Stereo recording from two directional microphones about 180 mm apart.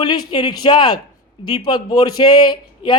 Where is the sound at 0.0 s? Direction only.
25° left (ahead or behind).